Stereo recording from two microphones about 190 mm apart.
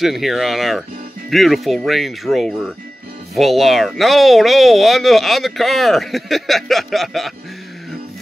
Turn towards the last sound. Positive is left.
turn(degrees=0)  # may be behind; listen again after turning